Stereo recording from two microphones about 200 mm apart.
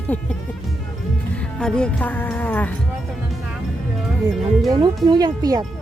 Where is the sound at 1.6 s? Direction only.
5° left (ahead or behind).